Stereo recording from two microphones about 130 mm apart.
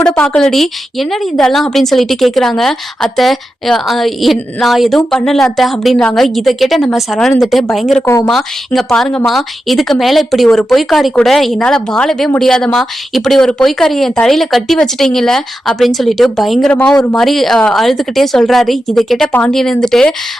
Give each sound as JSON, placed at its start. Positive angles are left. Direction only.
{"t": 0.2, "sound": "a woman's voice", "side_deg": 5}
{"t": 8.0, "sound": "a woman's voice", "side_deg": 25}
{"t": 8.3, "sound": "a woman's voice", "side_deg": 0}